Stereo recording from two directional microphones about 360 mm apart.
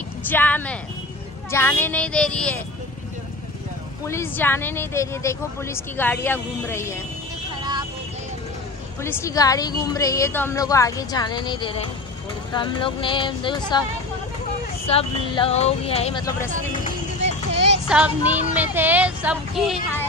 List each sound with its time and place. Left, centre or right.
0.3 s speech: centre
4.1 s a woman's voice: centre
9.0 s a woman's voice: centre
14.9 s a woman's voice: centre
17.8 s speech: centre